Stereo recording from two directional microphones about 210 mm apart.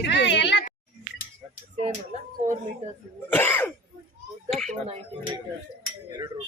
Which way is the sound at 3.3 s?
10° left (ahead or behind).